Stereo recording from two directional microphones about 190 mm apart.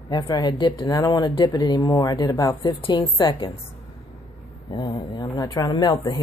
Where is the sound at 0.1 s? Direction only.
20° left (ahead or behind).